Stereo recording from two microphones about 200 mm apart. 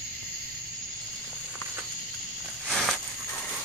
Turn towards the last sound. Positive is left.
turn(degrees=0)  # may be behind; listen again after turning